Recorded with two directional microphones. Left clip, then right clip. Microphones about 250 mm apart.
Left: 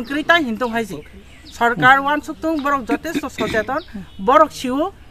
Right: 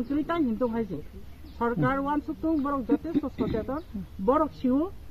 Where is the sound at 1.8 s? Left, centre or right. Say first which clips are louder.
Left 17 dB; centre.